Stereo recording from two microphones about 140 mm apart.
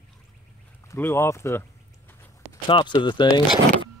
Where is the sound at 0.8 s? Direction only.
20° left (ahead or behind).